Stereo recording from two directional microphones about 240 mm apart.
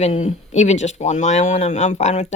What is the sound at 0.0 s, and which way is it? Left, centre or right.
Speech, left.